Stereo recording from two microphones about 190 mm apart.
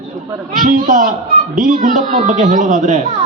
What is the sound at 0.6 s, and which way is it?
A man's voice, 45° right (ahead or behind).